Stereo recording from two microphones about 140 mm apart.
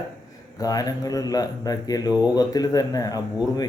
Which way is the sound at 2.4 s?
25° left (ahead or behind).